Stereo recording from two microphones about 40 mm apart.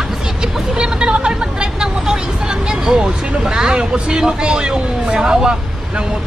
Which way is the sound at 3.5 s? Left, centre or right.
Centre.